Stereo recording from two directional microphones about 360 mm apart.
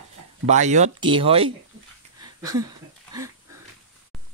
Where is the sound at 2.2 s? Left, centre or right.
Centre.